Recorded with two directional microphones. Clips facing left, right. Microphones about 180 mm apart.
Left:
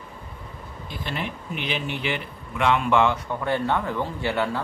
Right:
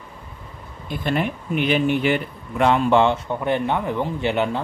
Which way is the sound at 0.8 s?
55° right (ahead or behind).